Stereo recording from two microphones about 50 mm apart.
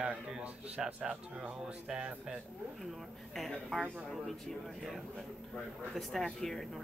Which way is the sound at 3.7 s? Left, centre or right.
Centre.